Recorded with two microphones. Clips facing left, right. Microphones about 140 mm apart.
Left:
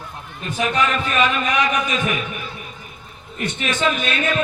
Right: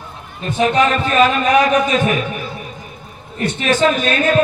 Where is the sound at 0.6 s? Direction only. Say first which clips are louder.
Right 6 dB; 30° right (ahead or behind).